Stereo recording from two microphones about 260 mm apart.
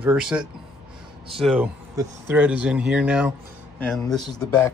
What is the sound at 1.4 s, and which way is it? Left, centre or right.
A man's voice, centre.